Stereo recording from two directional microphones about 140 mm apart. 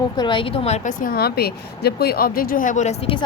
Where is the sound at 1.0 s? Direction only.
90° left; by 3.1 s 55° left (ahead or behind).